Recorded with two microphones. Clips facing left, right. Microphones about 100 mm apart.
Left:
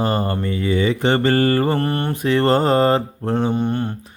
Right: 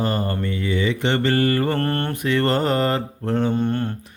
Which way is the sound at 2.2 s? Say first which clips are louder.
Left 4 dB; 30° left (ahead or behind).